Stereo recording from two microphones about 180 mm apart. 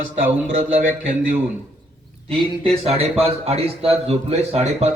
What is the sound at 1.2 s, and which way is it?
Speech, 10° right (ahead or behind).